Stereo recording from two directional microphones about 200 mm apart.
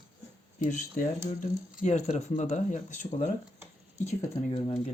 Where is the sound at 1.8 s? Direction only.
35° left (ahead or behind).